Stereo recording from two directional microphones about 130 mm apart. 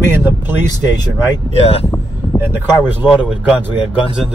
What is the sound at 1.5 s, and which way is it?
Speech, 50° left (ahead or behind).